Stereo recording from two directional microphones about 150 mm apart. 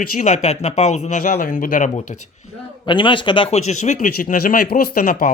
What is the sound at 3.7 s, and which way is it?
Speech, 50° left (ahead or behind).